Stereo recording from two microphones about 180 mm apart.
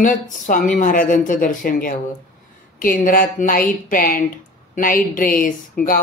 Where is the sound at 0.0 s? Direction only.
45° left (ahead or behind).